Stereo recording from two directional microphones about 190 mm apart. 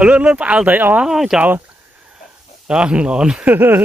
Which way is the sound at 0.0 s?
5° right (ahead or behind).